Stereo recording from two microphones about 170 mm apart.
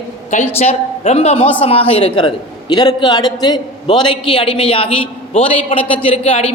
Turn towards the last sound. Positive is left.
turn(degrees=35)  # may be behind; listen again after turning